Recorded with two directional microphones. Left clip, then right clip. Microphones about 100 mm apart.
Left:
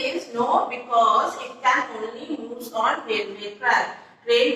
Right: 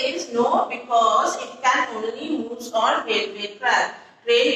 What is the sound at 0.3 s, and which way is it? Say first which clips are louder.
A woman's voice: right 1 dB; 40° right (ahead or behind).